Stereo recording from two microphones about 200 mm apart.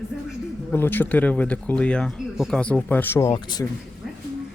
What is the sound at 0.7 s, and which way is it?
Speech, 10° left (ahead or behind).